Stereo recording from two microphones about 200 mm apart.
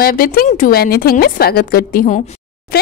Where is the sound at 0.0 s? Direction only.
45° left (ahead or behind).